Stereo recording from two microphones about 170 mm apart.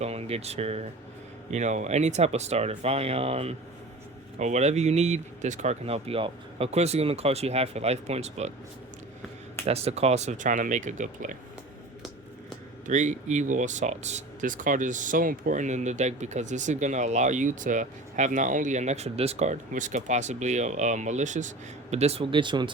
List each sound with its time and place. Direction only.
0.0 s speech: 35° right (ahead or behind)
9.6 s speech: 40° right (ahead or behind)
12.8 s speech: 45° right (ahead or behind); by 22.7 s 30° right (ahead or behind)